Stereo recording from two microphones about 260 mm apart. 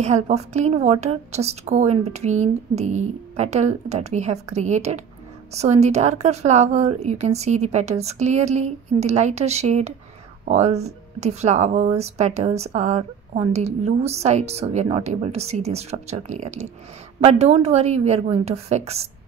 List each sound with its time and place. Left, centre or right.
0.0 s speech: right